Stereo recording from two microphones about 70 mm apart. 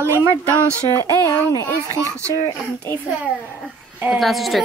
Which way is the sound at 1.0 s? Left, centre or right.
Left.